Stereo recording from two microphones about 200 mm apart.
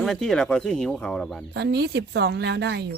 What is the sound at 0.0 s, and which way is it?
Speech, centre (ahead or behind).